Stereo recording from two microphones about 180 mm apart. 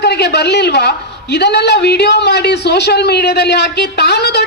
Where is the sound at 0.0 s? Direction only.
65° left (ahead or behind).